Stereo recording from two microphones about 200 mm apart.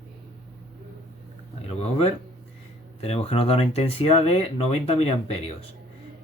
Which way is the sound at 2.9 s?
30° left (ahead or behind).